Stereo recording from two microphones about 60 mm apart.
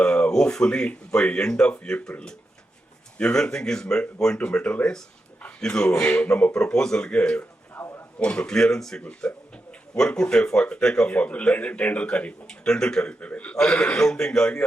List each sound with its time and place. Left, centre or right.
0.0 s speech: centre
3.2 s speech: centre
7.8 s a sound: left
8.2 s a man's voice: centre